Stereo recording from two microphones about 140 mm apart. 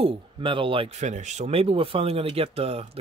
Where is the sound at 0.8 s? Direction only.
55° right (ahead or behind).